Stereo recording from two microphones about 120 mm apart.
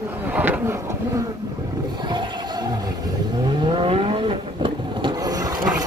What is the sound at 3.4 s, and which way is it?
Vehicle, 45° right (ahead or behind).